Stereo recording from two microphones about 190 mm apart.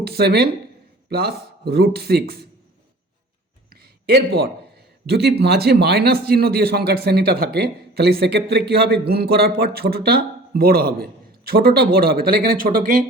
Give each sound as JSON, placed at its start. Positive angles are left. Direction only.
{"t": 0.0, "sound": "a man's voice", "side_deg": -55}
{"t": 3.7, "sound": "a sound", "side_deg": -55}
{"t": 5.0, "sound": "a man's voice", "side_deg": -60}